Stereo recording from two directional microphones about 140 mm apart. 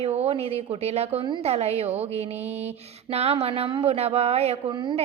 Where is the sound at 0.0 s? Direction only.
50° right (ahead or behind).